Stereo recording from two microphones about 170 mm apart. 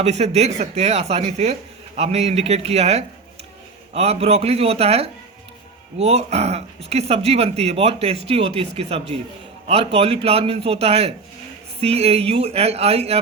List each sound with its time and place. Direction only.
0.0 s speech: 40° right (ahead or behind)